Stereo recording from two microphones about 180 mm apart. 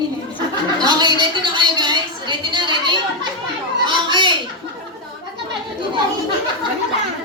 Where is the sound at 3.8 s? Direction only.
25° right (ahead or behind).